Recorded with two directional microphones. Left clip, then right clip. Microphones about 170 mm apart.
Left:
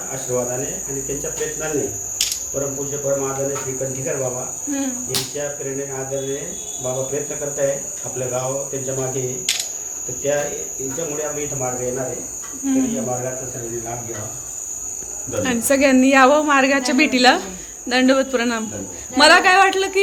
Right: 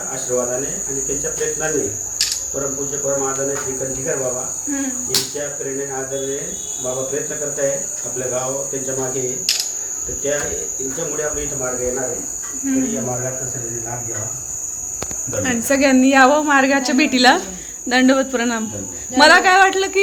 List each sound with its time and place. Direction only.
15.4 s speech: 5° left (ahead or behind)